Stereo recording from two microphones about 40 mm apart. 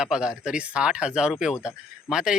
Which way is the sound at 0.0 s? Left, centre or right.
Centre.